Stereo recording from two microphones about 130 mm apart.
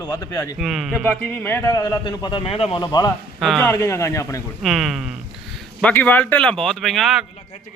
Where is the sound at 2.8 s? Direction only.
30° left (ahead or behind).